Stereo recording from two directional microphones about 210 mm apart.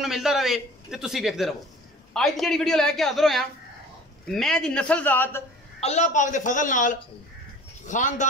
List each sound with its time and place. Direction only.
0.0 s a man's voice: centre (ahead or behind)
5.8 s a man's voice: 30° left (ahead or behind)